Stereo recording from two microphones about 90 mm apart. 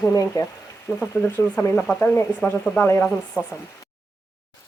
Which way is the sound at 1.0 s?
25° left (ahead or behind).